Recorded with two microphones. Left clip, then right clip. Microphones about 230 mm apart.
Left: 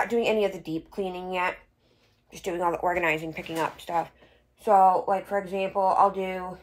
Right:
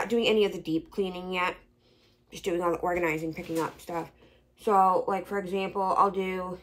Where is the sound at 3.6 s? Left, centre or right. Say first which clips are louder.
Left 6 dB; centre.